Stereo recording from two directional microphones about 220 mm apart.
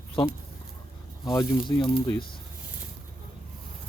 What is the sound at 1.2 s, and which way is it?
Speech, 15° left (ahead or behind).